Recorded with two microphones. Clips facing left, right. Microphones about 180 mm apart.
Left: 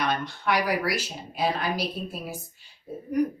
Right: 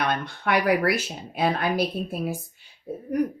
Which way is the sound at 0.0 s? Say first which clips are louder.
Right 1 dB; 55° right (ahead or behind).